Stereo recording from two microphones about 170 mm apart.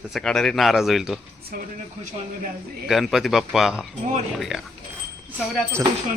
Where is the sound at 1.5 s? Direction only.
60° right (ahead or behind).